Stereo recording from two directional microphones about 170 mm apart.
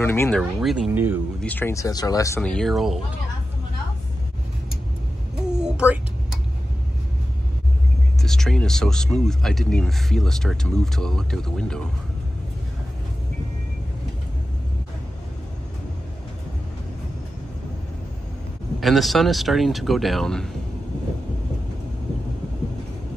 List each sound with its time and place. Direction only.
0.0 s speech: 10° left (ahead or behind)
0.4 s speech: 5° right (ahead or behind)
1.4 s speech: 10° left (ahead or behind)
2.4 s speech: 5° left (ahead or behind)
5.5 s a sound: 5° right (ahead or behind)
8.2 s speech: 5° left (ahead or behind)
18.8 s speech: centre (ahead or behind)